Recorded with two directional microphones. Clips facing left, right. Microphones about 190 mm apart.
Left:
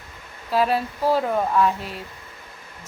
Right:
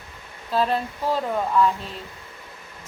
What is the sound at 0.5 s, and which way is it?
Speech, 10° left (ahead or behind).